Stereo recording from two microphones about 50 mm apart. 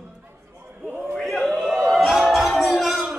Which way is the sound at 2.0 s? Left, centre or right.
Centre.